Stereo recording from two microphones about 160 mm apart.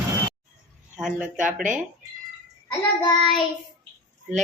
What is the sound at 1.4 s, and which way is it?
Speech, 55° right (ahead or behind).